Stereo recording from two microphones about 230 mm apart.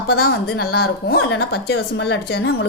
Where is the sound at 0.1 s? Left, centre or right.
Left.